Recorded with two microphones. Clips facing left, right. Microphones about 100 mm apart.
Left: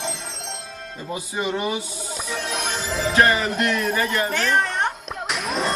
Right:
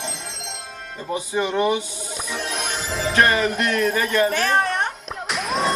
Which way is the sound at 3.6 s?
20° left (ahead or behind).